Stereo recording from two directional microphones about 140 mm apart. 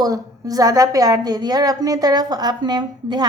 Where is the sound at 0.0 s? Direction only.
25° right (ahead or behind).